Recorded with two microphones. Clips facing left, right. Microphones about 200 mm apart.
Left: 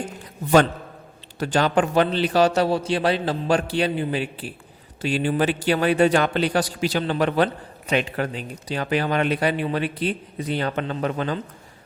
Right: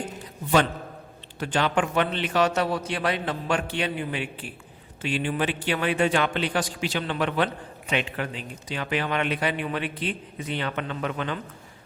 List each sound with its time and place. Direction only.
1.4 s a man's voice: 40° left (ahead or behind)